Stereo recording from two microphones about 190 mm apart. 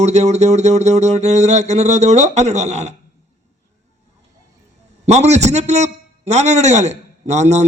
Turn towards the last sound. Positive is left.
turn(degrees=-35)  # may be behind; listen again after turning